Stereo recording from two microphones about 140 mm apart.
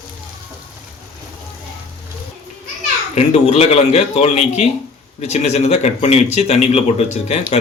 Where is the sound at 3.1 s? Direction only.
50° left (ahead or behind).